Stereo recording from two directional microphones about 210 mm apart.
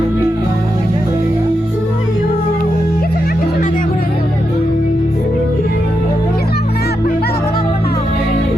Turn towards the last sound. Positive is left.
turn(degrees=45)  # may be behind; listen again after turning